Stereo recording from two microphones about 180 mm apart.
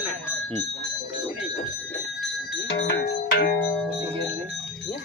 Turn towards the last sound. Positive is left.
turn(degrees=65)  # may be behind; listen again after turning